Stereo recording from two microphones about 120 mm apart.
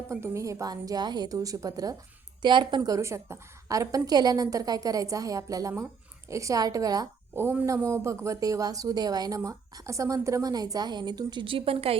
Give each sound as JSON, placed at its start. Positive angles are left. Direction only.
{"t": 0.1, "sound": "a woman's voice", "side_deg": -25}
{"t": 2.4, "sound": "speech", "side_deg": -40}
{"t": 7.3, "sound": "speech", "side_deg": -20}